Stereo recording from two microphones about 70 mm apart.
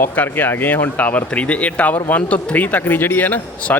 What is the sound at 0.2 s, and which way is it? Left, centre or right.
Speech, left.